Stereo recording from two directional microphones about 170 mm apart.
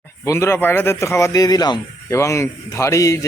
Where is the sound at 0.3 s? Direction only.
15° left (ahead or behind).